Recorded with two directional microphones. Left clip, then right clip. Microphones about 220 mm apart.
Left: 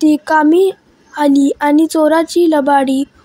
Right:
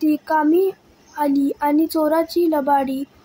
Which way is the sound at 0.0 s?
30° left (ahead or behind).